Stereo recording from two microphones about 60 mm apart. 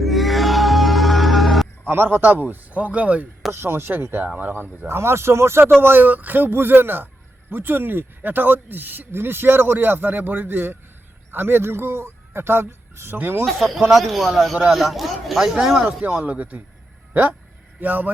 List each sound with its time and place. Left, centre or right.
0.0 s music: centre
1.9 s a man's voice: right
3.5 s speech: right
4.9 s speech: right
5.8 s a man's voice: right
13.4 s speech: centre
15.8 s a man's voice: right
17.7 s a man's voice: right